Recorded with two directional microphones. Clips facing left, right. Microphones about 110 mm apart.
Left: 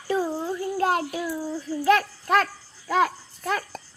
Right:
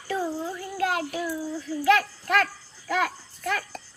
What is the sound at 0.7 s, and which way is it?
Child singing, 35° left (ahead or behind).